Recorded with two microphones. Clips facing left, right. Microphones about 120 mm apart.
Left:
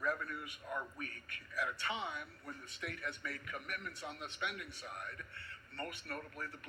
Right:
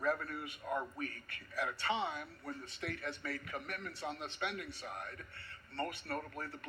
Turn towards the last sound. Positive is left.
turn(degrees=-35)  # may be behind; listen again after turning